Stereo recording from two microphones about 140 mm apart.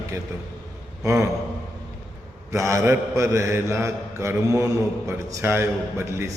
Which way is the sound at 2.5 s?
20° right (ahead or behind).